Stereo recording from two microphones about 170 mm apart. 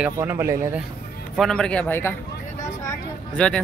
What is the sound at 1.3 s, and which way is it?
Speech, 5° left (ahead or behind).